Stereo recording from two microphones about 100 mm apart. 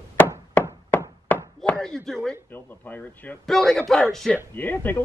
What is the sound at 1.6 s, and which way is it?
Speech, 5° left (ahead or behind).